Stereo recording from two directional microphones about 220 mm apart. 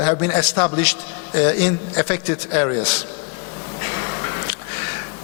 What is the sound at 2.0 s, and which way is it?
A man's voice, 15° left (ahead or behind).